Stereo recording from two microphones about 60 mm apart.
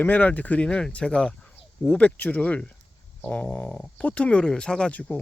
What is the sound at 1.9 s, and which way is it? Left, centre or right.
Speech, left.